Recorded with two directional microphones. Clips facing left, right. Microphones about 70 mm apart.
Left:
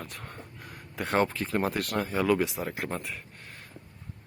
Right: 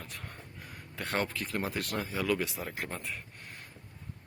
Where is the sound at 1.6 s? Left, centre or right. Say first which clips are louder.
Left 5 dB; left.